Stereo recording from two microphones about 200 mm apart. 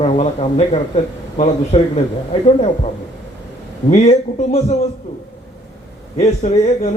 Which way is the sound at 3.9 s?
35° left (ahead or behind).